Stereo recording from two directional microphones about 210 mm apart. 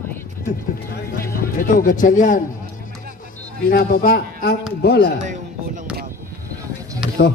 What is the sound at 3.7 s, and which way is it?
A man's voice, 45° left (ahead or behind).